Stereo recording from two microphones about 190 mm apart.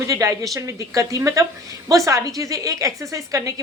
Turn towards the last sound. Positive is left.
turn(degrees=-15)  # may be behind; listen again after turning